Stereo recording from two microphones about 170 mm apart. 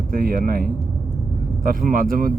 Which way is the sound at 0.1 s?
55° right (ahead or behind).